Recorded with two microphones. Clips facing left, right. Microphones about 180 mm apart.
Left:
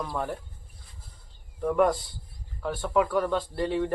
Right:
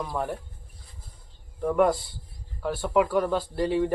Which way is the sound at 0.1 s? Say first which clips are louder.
Right 2 dB; 10° right (ahead or behind).